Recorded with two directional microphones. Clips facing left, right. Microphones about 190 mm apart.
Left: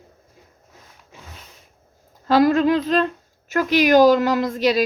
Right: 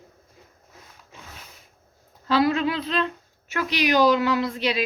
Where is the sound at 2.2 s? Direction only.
45° left (ahead or behind).